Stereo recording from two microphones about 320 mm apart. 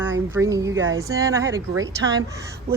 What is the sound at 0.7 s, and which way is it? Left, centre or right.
Speech, right.